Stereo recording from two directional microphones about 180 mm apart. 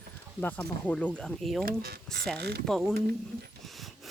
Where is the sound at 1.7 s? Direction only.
60° right (ahead or behind).